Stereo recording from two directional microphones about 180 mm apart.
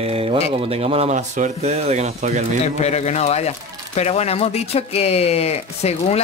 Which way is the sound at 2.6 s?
40° left (ahead or behind).